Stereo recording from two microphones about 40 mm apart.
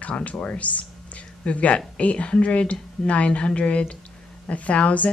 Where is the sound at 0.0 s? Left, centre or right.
Left.